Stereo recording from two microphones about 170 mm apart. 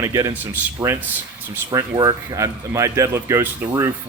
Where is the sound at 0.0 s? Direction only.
20° right (ahead or behind).